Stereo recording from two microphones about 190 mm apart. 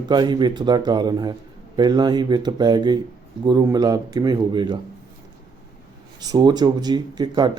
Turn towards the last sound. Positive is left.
turn(degrees=-20)  # may be behind; listen again after turning